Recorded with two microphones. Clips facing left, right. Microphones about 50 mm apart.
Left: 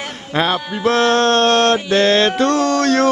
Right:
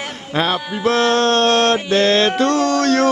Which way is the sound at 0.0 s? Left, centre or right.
Centre.